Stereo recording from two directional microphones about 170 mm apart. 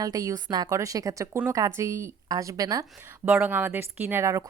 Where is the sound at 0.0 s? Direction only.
20° right (ahead or behind).